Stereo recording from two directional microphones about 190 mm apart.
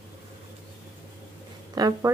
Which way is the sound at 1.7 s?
20° right (ahead or behind).